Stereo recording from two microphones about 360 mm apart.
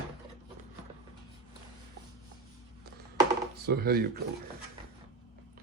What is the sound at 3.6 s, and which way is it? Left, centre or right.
Speech, right.